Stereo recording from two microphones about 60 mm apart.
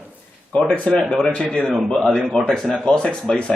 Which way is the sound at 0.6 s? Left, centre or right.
Centre.